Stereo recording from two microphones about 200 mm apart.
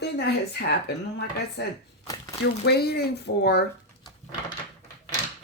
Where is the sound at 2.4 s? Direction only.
55° left (ahead or behind).